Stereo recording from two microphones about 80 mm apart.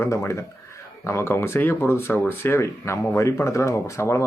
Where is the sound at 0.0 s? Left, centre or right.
Left.